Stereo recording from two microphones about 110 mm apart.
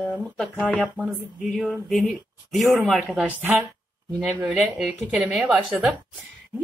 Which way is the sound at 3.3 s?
15° right (ahead or behind).